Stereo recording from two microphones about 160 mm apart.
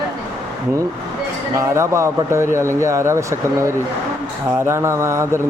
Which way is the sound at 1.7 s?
15° right (ahead or behind).